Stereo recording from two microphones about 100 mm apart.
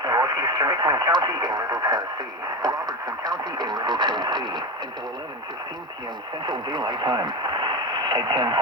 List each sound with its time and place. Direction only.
0.0 s speech: 45° right (ahead or behind)
6.4 s speech: 50° right (ahead or behind)